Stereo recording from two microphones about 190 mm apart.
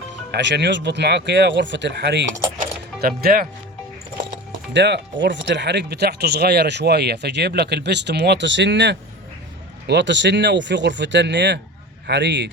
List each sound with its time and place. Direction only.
0.3 s speech: 65° right (ahead or behind)
2.6 s music: 50° right (ahead or behind)
4.7 s speech: 65° right (ahead or behind)